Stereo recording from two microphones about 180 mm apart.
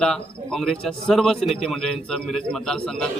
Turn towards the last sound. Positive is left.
turn(degrees=5)  # may be behind; listen again after turning